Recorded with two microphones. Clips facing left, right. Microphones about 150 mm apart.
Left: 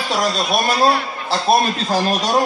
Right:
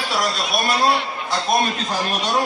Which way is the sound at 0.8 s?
30° left (ahead or behind).